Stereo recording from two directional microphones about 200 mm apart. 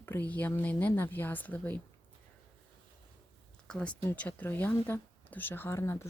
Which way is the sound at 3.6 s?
5° left (ahead or behind).